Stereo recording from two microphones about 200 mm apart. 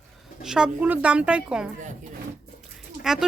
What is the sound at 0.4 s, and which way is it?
Speech, 5° right (ahead or behind).